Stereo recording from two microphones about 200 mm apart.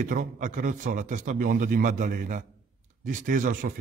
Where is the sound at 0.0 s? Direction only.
40° right (ahead or behind).